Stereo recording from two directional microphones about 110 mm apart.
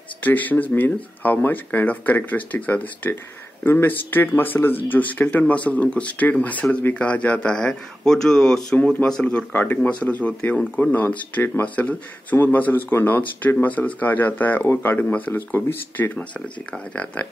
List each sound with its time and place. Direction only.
0.2 s speech: 15° left (ahead or behind)
16.2 s speech: 5° left (ahead or behind)